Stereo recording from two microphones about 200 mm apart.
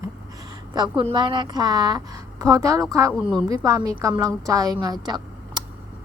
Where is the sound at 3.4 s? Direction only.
15° right (ahead or behind).